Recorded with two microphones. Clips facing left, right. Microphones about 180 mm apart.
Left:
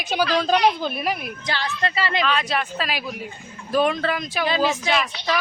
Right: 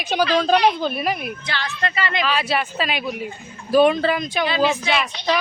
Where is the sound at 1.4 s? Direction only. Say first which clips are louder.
Left 4 dB; 35° left (ahead or behind).